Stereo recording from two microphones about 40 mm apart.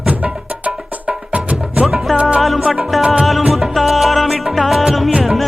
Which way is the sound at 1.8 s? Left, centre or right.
Centre.